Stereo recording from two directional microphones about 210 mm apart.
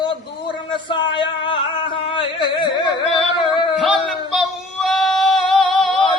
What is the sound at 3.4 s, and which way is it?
Music, 20° left (ahead or behind).